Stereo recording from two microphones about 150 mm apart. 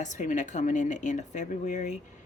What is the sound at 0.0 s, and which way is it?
Speech, 55° left (ahead or behind).